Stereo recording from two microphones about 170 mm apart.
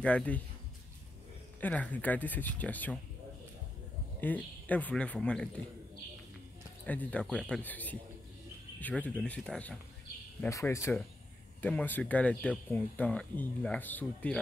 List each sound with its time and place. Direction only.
0.0 s speech: 10° left (ahead or behind)
1.6 s speech: 10° left (ahead or behind)
4.2 s speech: 10° left (ahead or behind)
6.9 s speech: 10° left (ahead or behind)
10.4 s speech: 15° left (ahead or behind)